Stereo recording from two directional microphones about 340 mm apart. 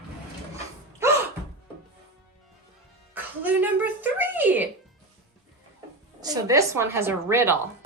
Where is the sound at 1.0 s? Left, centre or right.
Centre.